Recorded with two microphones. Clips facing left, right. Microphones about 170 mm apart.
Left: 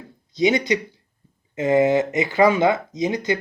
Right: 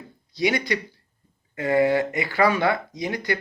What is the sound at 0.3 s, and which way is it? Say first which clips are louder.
Speech: left 5 dB; 20° left (ahead or behind).